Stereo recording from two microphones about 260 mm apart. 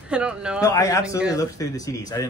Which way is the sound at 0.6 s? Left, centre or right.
Centre.